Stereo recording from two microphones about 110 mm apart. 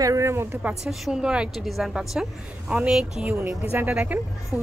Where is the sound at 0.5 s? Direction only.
10° right (ahead or behind).